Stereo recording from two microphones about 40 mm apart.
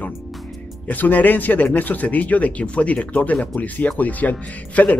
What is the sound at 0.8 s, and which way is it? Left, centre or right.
A man's voice, left.